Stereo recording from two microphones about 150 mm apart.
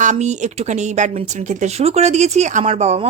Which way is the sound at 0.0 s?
50° right (ahead or behind).